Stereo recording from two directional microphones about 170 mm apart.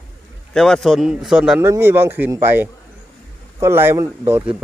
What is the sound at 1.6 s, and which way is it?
Speech, 15° right (ahead or behind).